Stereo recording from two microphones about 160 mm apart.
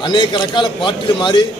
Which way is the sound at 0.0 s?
30° left (ahead or behind).